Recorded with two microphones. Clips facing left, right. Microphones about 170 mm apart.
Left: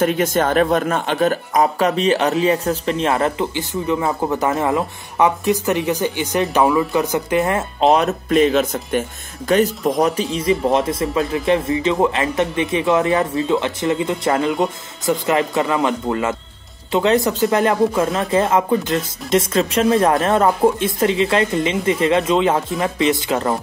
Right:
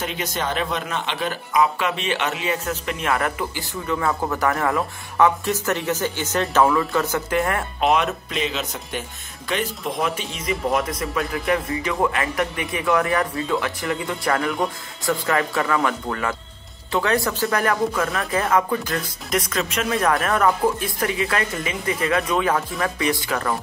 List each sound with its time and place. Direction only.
0.0 s speech: 50° left (ahead or behind); by 7.9 s 20° left (ahead or behind)
7.9 s speech: 40° left (ahead or behind); by 23.5 s 25° left (ahead or behind)